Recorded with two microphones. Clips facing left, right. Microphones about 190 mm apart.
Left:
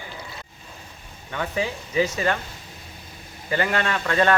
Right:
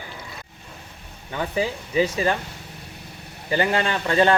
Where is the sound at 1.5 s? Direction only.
30° right (ahead or behind).